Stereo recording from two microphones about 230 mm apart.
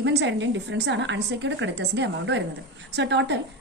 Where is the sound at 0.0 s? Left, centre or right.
Right.